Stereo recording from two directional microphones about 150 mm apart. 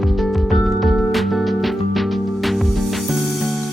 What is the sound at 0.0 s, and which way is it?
Music, centre (ahead or behind).